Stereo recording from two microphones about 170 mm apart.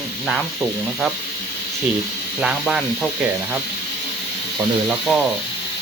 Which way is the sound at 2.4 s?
5° right (ahead or behind).